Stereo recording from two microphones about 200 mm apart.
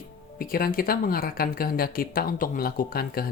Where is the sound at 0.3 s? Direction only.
45° left (ahead or behind).